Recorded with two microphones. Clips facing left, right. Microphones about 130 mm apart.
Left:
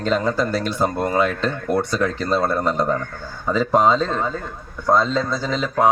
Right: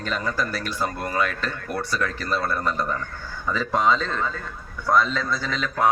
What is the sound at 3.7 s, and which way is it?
Speech, 45° left (ahead or behind).